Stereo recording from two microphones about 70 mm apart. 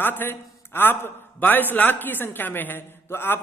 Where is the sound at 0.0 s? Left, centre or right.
Left.